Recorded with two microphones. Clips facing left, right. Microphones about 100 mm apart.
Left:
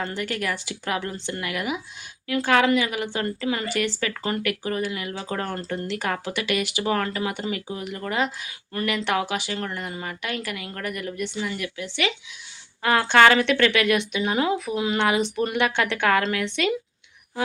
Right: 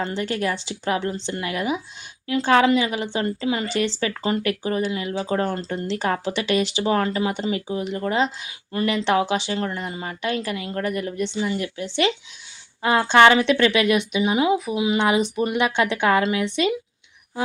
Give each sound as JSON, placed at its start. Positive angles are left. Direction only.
{"t": 0.0, "sound": "a woman's voice", "side_deg": -25}